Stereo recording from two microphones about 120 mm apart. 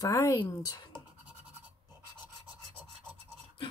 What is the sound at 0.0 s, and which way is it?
Speech, 25° left (ahead or behind).